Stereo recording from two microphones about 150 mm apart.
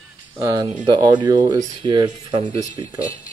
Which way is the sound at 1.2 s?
25° right (ahead or behind).